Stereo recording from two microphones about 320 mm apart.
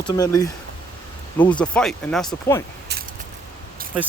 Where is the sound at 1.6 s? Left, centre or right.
Centre.